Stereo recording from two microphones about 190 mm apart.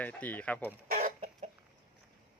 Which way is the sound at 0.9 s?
45° right (ahead or behind).